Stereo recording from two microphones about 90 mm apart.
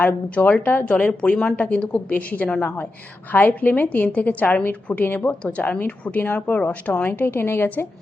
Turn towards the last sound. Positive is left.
turn(degrees=20)  # may be behind; listen again after turning